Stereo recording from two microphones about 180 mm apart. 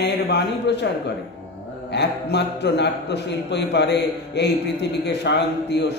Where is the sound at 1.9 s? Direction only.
70° left (ahead or behind).